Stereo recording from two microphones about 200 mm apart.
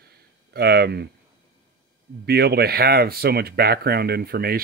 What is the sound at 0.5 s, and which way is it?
Speech, 55° right (ahead or behind).